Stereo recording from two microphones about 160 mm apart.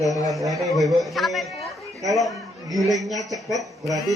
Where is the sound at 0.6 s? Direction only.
Centre (ahead or behind).